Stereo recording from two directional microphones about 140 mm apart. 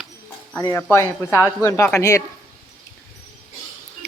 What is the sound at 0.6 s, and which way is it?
Speech, 20° left (ahead or behind).